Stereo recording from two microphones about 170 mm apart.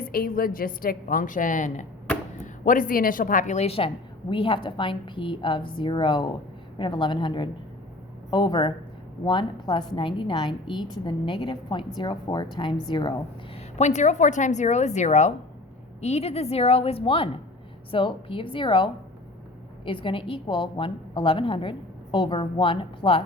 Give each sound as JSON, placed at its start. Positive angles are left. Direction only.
{"t": 0.0, "sound": "a woman's voice", "side_deg": 60}
{"t": 13.6, "sound": "a woman's voice", "side_deg": 40}